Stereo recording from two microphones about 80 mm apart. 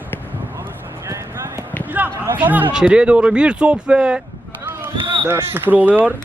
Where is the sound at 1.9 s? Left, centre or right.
Right.